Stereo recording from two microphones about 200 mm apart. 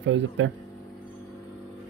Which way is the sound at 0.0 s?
70° right (ahead or behind).